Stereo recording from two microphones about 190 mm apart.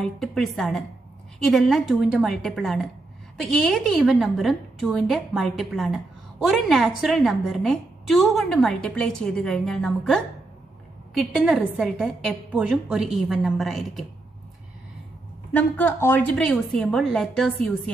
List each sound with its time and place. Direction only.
0.0 s a woman's voice: centre (ahead or behind)
15.5 s a woman's voice: 10° left (ahead or behind)